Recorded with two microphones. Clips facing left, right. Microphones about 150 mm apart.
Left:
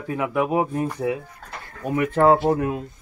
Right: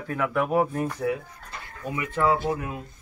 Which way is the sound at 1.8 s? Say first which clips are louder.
Left 7 dB; 55° left (ahead or behind).